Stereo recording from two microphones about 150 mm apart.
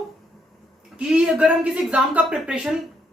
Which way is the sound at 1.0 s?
5° right (ahead or behind).